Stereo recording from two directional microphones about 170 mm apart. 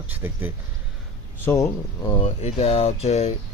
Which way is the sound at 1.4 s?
15° left (ahead or behind).